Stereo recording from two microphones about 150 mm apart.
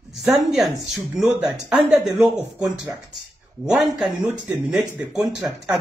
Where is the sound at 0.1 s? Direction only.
Centre (ahead or behind).